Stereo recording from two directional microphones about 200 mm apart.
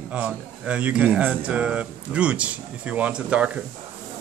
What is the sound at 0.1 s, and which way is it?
Speech, 5° right (ahead or behind).